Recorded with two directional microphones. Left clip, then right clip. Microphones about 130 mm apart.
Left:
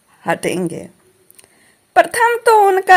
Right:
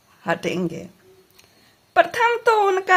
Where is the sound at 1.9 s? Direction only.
30° left (ahead or behind).